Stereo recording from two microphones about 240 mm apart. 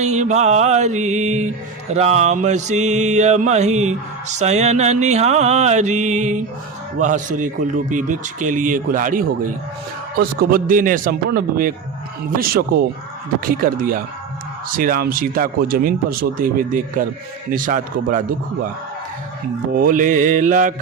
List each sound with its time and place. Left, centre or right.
0.0 s music: right
7.0 s speech: right
19.7 s speech: right